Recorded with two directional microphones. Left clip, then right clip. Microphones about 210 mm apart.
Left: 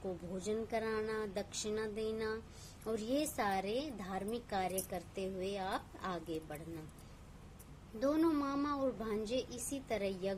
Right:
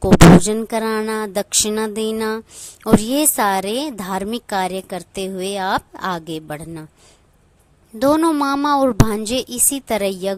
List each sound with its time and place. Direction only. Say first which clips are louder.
0.4 s a woman's voice: right 17 dB; 50° right (ahead or behind)
7.9 s a woman's voice: right 18 dB; 50° right (ahead or behind)